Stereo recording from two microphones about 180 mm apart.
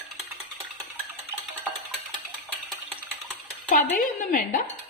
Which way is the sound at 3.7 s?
50° left (ahead or behind).